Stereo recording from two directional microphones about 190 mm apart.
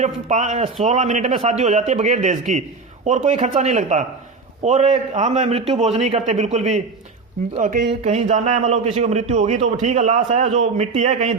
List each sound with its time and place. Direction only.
0.0 s a man's voice: 40° right (ahead or behind)